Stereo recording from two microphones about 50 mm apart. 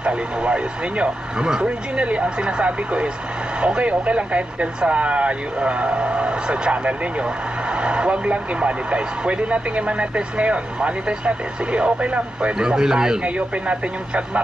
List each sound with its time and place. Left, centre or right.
0.0 s speech: right
13.2 s speech: right